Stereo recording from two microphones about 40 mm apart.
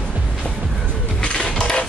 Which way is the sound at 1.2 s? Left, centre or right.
Left.